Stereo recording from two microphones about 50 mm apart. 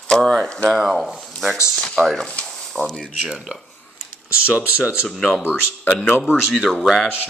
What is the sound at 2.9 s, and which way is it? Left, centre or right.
Speech, centre.